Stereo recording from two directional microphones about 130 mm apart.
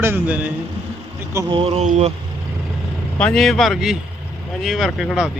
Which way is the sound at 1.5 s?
45° right (ahead or behind).